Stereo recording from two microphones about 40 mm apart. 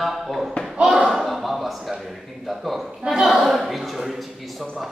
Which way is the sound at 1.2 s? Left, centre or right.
Centre.